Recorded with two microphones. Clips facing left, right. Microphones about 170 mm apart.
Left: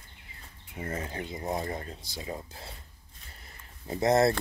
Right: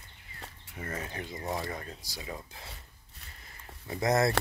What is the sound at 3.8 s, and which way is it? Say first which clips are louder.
Speech: left 3 dB; 25° left (ahead or behind).